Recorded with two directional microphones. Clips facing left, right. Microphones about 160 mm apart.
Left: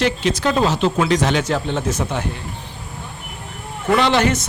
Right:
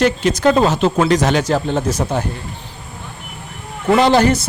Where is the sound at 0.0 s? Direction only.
45° right (ahead or behind).